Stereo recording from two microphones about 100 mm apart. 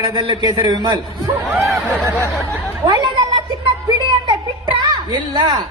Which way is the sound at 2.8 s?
40° right (ahead or behind).